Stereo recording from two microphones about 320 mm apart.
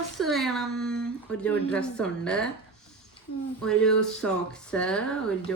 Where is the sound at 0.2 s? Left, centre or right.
Centre.